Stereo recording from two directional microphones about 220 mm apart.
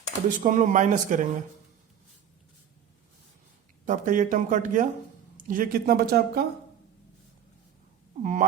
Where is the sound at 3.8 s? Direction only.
35° right (ahead or behind).